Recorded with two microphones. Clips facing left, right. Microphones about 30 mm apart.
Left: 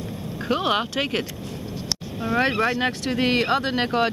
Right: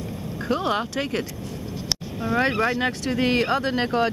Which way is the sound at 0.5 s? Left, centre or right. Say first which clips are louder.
Left 2 dB; left.